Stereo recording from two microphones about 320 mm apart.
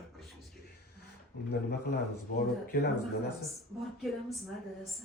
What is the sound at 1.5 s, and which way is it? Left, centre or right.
Speech, left.